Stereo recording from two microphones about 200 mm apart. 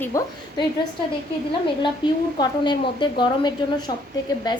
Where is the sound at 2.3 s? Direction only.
25° left (ahead or behind).